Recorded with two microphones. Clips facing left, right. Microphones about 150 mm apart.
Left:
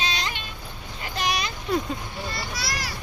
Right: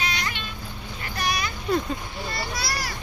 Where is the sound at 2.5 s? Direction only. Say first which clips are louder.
Right 2 dB; 40° right (ahead or behind).